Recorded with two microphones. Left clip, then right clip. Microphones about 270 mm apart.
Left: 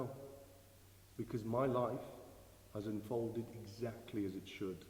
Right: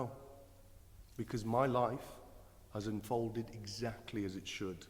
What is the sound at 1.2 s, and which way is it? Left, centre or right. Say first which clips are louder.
A man's voice: right 3 dB; right.